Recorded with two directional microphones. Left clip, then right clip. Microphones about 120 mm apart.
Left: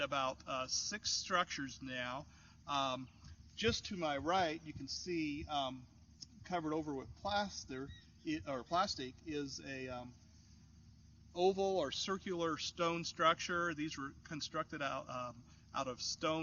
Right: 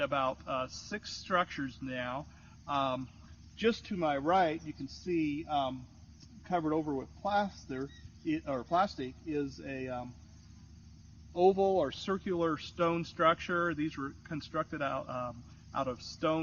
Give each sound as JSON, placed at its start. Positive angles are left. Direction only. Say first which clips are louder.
{"t": 0.0, "sound": "speech", "louder": "right 6 dB", "side_deg": 40}
{"t": 11.3, "sound": "speech", "louder": "right 7 dB", "side_deg": 35}